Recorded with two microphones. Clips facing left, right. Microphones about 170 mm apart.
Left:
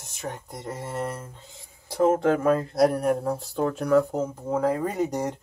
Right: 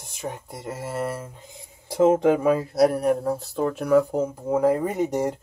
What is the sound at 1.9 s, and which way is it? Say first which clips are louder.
Speech: right 3 dB; 20° right (ahead or behind).